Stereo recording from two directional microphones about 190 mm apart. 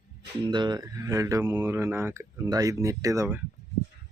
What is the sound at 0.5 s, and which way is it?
Speech, 25° right (ahead or behind).